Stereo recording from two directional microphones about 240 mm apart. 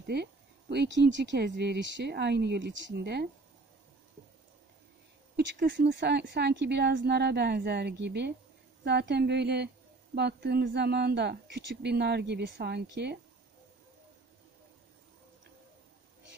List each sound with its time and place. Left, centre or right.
0.0 s speech: right
5.3 s speech: right